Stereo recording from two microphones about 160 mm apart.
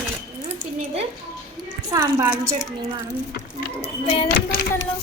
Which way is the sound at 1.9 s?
25° right (ahead or behind).